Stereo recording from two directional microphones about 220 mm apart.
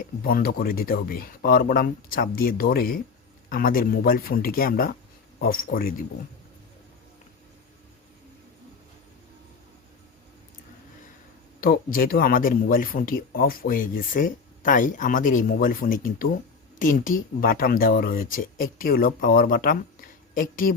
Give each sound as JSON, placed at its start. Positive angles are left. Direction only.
{"t": 0.3, "sound": "speech", "side_deg": 40}
{"t": 11.6, "sound": "speech", "side_deg": 40}